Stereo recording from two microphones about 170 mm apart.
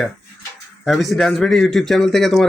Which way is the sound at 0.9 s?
Centre (ahead or behind).